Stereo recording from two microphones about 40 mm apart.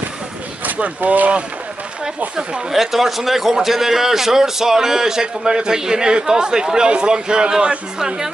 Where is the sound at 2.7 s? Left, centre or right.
Centre.